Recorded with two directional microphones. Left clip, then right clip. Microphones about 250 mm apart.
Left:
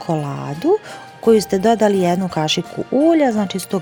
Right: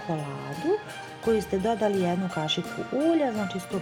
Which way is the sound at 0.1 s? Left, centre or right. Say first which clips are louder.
Left 11 dB; left.